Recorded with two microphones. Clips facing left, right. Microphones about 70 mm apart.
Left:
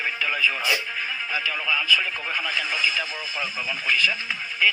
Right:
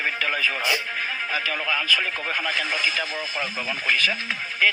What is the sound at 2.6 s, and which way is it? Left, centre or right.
Speech, right.